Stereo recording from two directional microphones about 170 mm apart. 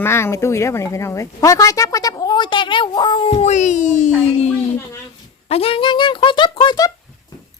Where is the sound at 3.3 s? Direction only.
45° left (ahead or behind).